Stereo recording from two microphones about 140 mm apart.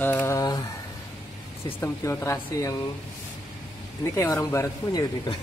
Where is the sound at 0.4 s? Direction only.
30° left (ahead or behind).